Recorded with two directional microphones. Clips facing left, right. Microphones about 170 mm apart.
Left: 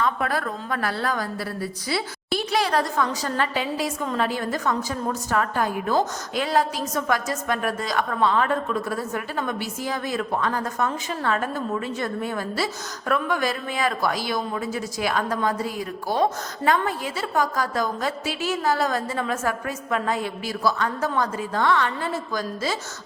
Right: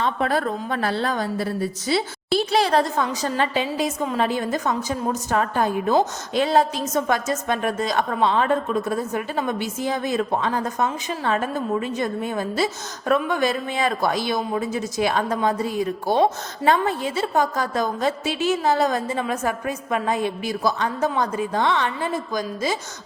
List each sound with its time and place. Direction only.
0.0 s a woman's voice: 25° right (ahead or behind)